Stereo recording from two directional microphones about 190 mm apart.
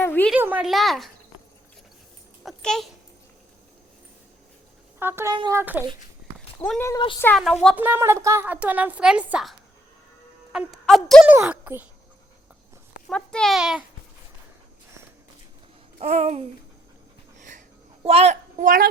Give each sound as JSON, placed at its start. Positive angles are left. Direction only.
{"t": 0.0, "sound": "a sound", "side_deg": 10}
{"t": 0.3, "sound": "a sound", "side_deg": -10}
{"t": 2.4, "sound": "dog", "side_deg": 0}
{"t": 4.9, "sound": "a woman's voice", "side_deg": -10}
{"t": 6.6, "sound": "speech", "side_deg": 10}
{"t": 7.8, "sound": "a woman's voice", "side_deg": -10}
{"t": 13.1, "sound": "speech", "side_deg": 5}
{"t": 16.0, "sound": "babbling", "side_deg": -35}
{"t": 18.0, "sound": "a child's voice", "side_deg": -35}